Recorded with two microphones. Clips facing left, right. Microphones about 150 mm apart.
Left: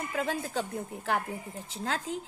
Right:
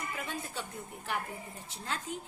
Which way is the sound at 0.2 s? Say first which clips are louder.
Left 8 dB; 90° left.